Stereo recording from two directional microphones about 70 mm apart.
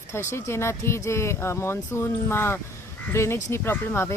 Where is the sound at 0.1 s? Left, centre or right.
Left.